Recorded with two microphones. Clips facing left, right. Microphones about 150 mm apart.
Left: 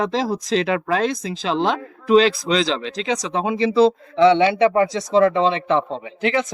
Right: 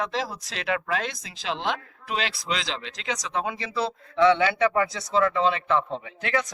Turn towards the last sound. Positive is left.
turn(degrees=25)  # may be behind; listen again after turning